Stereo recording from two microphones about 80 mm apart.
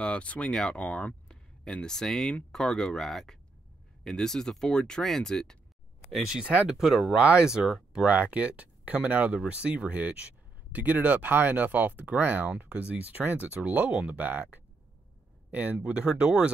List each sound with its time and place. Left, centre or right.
0.0 s speech: centre
6.0 s speech: centre
6.8 s speech: centre
7.2 s speech: centre
8.1 s speech: centre